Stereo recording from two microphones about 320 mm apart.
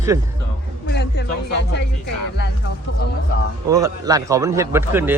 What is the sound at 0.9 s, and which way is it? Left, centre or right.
Music, left.